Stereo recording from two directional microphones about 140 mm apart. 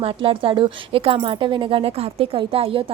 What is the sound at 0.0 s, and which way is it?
Speech, 40° right (ahead or behind).